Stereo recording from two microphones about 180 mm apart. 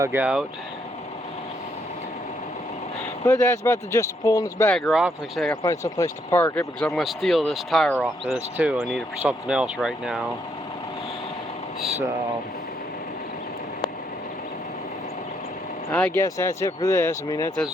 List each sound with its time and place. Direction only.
0.0 s speech: 10° right (ahead or behind)
3.2 s speech: 15° left (ahead or behind)
4.7 s speech: centre (ahead or behind)
5.6 s speech: 15° left (ahead or behind); by 10.2 s 5° right (ahead or behind)
15.9 s speech: 5° left (ahead or behind)